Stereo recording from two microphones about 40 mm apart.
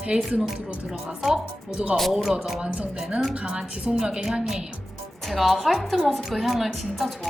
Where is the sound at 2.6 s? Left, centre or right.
Right.